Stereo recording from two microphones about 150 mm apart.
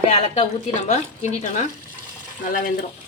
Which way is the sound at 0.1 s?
50° left (ahead or behind).